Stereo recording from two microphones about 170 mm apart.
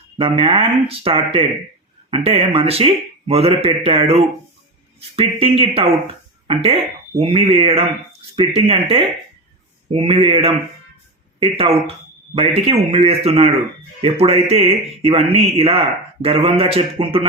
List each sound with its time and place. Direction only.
0.2 s speech: 30° right (ahead or behind)
11.5 s speech: 35° right (ahead or behind)